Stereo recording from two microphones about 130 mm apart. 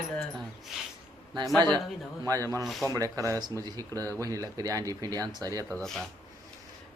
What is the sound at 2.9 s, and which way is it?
Speech, 25° right (ahead or behind).